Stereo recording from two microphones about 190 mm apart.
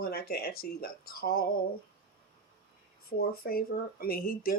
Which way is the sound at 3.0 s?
55° left (ahead or behind).